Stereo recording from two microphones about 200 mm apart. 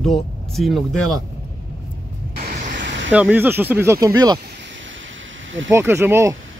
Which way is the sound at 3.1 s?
10° right (ahead or behind).